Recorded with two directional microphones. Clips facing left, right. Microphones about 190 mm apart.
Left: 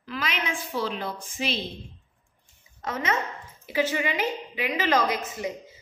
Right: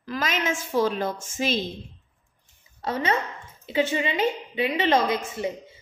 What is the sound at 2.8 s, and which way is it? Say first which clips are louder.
A woman's voice: right 3 dB; 30° right (ahead or behind).